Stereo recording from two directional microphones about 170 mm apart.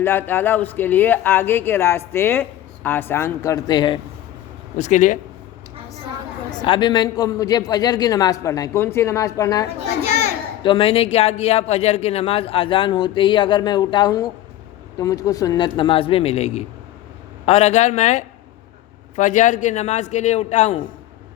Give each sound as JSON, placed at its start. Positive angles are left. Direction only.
{"t": 0.0, "sound": "speech", "side_deg": 15}
{"t": 4.8, "sound": "a man's voice", "side_deg": 45}
{"t": 6.7, "sound": "a man's voice", "side_deg": 25}
{"t": 10.1, "sound": "children playing", "side_deg": 40}
{"t": 10.6, "sound": "a man's voice", "side_deg": 30}